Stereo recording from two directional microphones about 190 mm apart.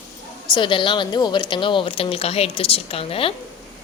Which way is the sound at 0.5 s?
25° left (ahead or behind).